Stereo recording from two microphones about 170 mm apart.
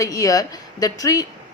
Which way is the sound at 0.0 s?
20° left (ahead or behind).